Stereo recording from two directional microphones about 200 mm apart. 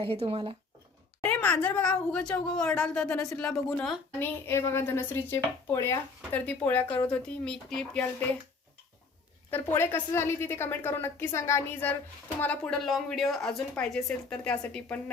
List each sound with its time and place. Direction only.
0.0 s speech: 30° right (ahead or behind)
1.2 s a woman's voice: 10° left (ahead or behind)
9.5 s a woman's voice: 10° left (ahead or behind)